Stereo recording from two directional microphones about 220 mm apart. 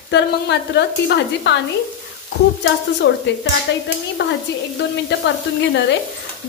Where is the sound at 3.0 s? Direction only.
55° left (ahead or behind).